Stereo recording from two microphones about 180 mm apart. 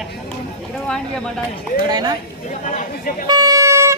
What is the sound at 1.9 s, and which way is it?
Speech, 20° right (ahead or behind).